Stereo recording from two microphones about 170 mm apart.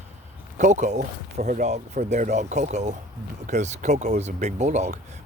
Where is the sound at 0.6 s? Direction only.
45° right (ahead or behind).